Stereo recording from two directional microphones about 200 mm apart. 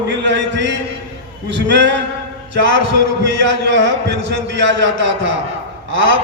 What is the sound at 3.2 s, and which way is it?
A man's voice, 60° right (ahead or behind).